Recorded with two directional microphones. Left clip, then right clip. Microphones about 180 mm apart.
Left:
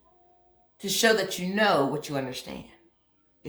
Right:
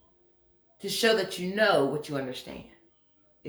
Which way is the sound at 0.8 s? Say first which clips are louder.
Left 2 dB; 35° left (ahead or behind).